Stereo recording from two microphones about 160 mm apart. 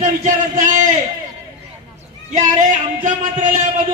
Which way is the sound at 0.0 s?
50° right (ahead or behind).